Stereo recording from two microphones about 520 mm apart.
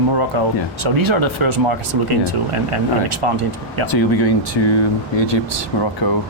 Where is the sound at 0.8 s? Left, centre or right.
Right.